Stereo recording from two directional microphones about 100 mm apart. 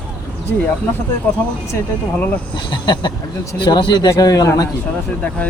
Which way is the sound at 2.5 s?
50° left (ahead or behind).